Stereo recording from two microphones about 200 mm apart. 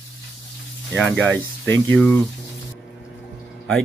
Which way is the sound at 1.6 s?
10° left (ahead or behind).